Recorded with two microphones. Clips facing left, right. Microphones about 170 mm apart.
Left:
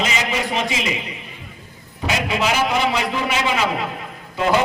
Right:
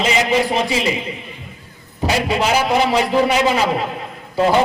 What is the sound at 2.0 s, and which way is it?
A man's voice, 35° right (ahead or behind).